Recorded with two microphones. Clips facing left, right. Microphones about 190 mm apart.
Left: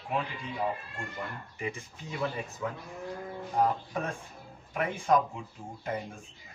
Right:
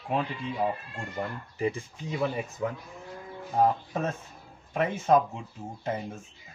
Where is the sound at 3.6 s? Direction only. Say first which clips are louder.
Right 4 dB; 25° right (ahead or behind).